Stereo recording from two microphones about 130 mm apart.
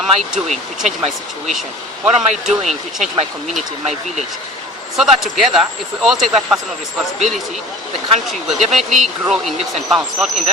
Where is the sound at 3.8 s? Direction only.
60° right (ahead or behind).